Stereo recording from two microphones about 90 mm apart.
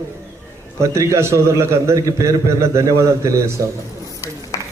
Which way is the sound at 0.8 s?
35° right (ahead or behind).